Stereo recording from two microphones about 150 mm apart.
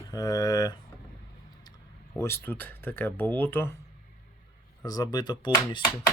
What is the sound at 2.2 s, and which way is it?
Speech, 15° left (ahead or behind).